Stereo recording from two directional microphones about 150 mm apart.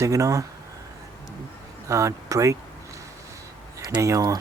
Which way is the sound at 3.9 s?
25° right (ahead or behind).